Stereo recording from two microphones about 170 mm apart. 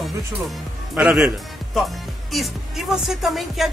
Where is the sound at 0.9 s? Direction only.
5° right (ahead or behind).